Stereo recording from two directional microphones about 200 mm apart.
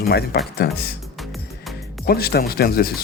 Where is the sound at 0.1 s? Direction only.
50° left (ahead or behind).